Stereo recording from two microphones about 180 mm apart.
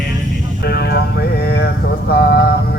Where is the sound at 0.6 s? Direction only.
65° left (ahead or behind).